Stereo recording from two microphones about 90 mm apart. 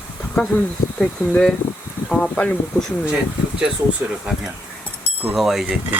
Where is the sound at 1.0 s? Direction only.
15° left (ahead or behind).